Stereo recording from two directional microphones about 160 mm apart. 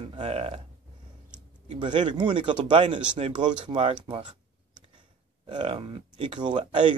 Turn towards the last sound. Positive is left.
turn(degrees=-30)  # may be behind; listen again after turning